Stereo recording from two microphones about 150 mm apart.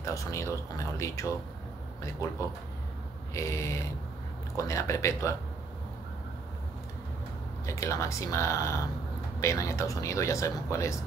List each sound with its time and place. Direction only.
0.0 s speech: 20° left (ahead or behind)
7.6 s speech: 20° left (ahead or behind)